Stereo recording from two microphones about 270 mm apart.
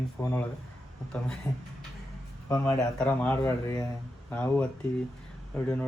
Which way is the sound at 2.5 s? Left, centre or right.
Centre.